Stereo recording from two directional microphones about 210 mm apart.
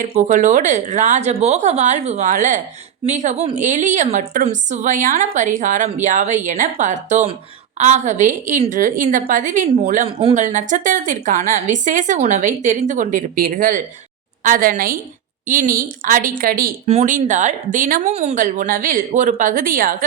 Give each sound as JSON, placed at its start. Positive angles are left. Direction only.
{"t": 0.0, "sound": "a woman's voice", "side_deg": -35}